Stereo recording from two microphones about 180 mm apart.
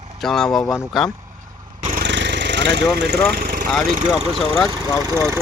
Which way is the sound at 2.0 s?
75° right (ahead or behind).